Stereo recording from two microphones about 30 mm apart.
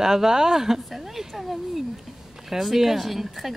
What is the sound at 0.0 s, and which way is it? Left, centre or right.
Speech, centre.